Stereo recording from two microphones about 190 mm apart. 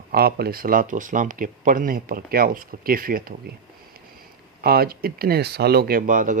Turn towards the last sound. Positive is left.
turn(degrees=-45)  # may be behind; listen again after turning